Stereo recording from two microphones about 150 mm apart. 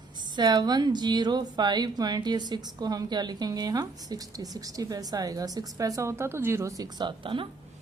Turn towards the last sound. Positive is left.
turn(degrees=-35)  # may be behind; listen again after turning